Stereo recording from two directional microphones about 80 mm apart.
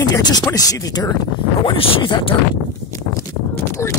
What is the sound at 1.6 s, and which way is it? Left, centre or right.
Speech, left.